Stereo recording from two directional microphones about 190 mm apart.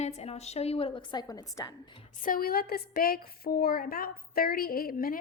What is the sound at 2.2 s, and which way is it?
A woman's voice, 50° left (ahead or behind).